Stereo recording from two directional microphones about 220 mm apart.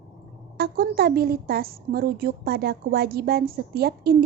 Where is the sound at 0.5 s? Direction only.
45° right (ahead or behind).